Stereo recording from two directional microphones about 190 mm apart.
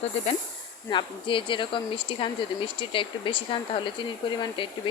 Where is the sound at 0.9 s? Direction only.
25° left (ahead or behind).